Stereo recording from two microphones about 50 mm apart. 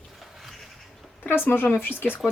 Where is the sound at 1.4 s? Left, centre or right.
Left.